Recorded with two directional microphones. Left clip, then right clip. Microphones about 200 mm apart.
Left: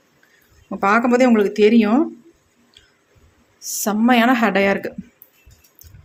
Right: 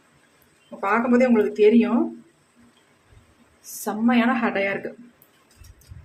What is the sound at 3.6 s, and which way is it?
A woman's voice, 50° left (ahead or behind).